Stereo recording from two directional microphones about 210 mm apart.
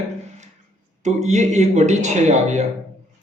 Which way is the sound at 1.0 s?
35° right (ahead or behind).